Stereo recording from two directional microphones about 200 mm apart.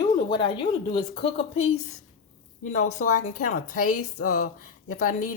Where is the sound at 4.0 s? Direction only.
90° left.